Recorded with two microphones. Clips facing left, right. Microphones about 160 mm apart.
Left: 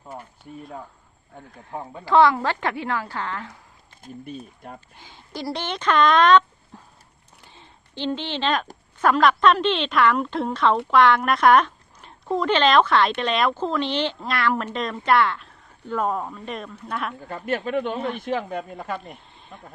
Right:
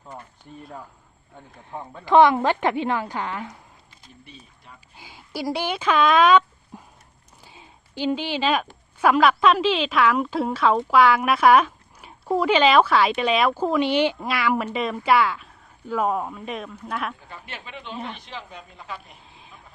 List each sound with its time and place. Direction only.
0.0 s speech: 10° left (ahead or behind)
2.0 s a woman's voice: 20° right (ahead or behind)
4.0 s speech: 50° left (ahead or behind)
4.9 s speech: 10° right (ahead or behind)
7.4 s a sound: 10° right (ahead or behind)
9.0 s a woman's voice: 5° right (ahead or behind)
17.2 s speech: 50° left (ahead or behind)
19.1 s a sound: centre (ahead or behind)